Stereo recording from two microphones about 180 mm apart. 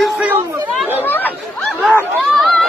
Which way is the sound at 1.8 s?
Centre (ahead or behind).